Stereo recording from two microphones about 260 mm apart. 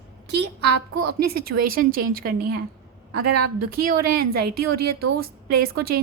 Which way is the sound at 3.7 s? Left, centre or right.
Right.